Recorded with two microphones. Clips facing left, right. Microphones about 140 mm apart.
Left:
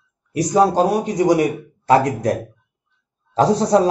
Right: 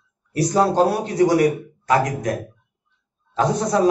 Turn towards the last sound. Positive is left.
turn(degrees=30)  # may be behind; listen again after turning